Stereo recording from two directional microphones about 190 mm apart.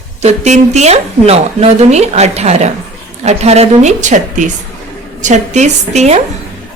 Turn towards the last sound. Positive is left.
turn(degrees=-35)  # may be behind; listen again after turning